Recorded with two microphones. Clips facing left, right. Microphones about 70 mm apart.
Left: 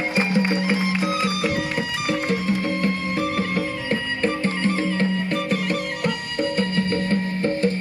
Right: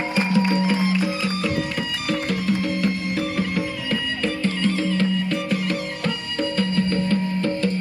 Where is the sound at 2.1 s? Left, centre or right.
Left.